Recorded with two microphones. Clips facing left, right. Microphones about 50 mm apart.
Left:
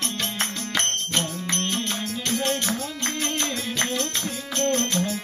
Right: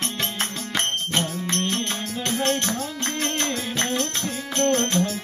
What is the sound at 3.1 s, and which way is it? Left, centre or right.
Music, right.